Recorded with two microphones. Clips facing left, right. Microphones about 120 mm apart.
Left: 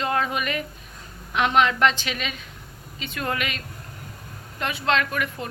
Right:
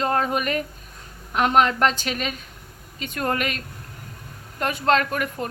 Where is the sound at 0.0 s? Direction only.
40° right (ahead or behind).